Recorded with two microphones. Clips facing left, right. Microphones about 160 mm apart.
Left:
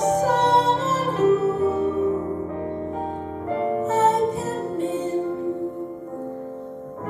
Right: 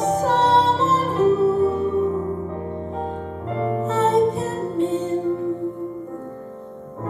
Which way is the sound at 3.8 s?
25° left (ahead or behind).